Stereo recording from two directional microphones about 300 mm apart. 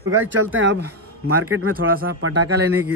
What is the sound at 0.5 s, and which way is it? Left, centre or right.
Speech, right.